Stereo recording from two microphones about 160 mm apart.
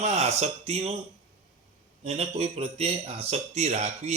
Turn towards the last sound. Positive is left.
turn(degrees=-45)  # may be behind; listen again after turning